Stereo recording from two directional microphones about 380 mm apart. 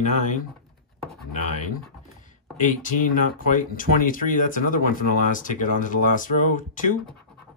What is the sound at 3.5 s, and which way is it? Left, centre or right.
Speech, left.